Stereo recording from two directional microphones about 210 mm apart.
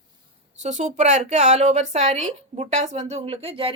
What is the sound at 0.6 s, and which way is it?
A woman's voice, 35° right (ahead or behind).